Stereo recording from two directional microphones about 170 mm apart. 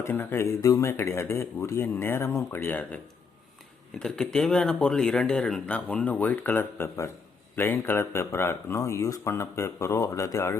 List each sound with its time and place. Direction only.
0.0 s speech: 15° left (ahead or behind)
4.0 s speech: 5° left (ahead or behind)